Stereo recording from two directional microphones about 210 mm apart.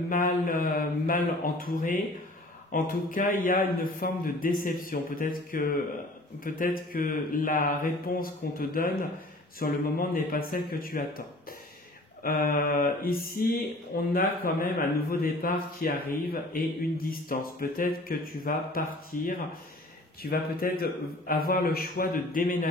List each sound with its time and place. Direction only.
0.1 s speech: 40° left (ahead or behind)